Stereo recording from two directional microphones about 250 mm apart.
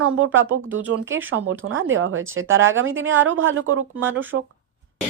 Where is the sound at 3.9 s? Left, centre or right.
Centre.